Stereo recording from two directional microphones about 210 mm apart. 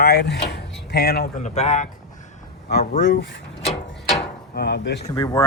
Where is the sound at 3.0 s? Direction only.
60° left (ahead or behind).